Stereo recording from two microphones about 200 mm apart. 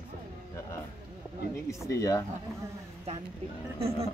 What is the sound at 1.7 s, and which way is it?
Speech, 15° left (ahead or behind).